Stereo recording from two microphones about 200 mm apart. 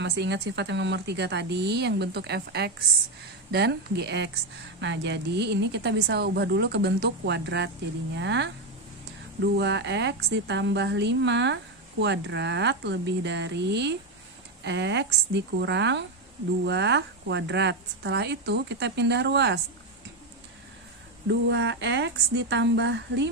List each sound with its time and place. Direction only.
0.0 s a woman's voice: 60° right (ahead or behind)
21.3 s a woman's voice: 60° right (ahead or behind)